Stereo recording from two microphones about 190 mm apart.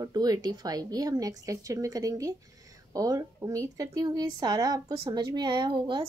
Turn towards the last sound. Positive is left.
turn(degrees=-25)  # may be behind; listen again after turning